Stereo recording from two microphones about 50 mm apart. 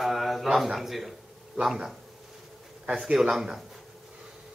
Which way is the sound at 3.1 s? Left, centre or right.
Centre.